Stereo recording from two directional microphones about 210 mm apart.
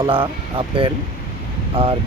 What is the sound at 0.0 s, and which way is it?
Speech, 25° right (ahead or behind).